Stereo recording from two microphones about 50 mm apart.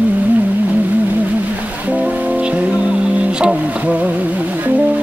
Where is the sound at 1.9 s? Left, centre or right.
Right.